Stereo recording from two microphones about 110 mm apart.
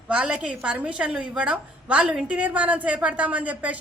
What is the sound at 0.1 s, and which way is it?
A woman's voice, 10° right (ahead or behind).